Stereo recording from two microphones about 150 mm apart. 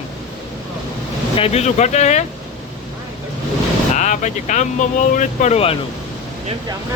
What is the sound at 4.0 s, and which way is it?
Speech, 50° left (ahead or behind).